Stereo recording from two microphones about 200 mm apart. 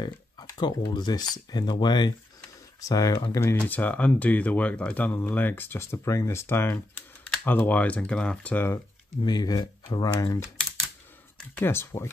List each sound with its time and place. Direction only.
0.0 s speech: 20° left (ahead or behind)
9.2 s speech: 20° left (ahead or behind)